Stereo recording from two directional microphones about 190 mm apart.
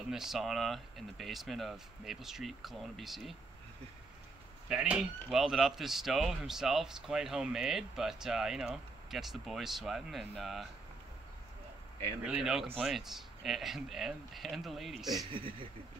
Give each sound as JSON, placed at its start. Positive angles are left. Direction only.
{"t": 0.1, "sound": "speech", "side_deg": 0}
{"t": 4.6, "sound": "speech", "side_deg": -5}
{"t": 12.3, "sound": "speech", "side_deg": -5}
{"t": 15.3, "sound": "speech", "side_deg": -25}